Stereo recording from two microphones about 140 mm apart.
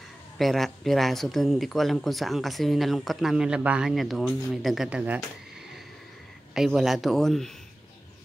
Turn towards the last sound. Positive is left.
turn(degrees=5)  # may be behind; listen again after turning